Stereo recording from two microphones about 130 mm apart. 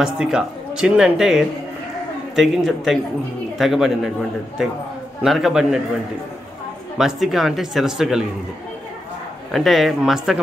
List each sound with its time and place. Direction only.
0.0 s speech: 5° right (ahead or behind)
5.2 s speech: 5° right (ahead or behind)
7.0 s speech: 5° right (ahead or behind)
9.5 s speech: centre (ahead or behind)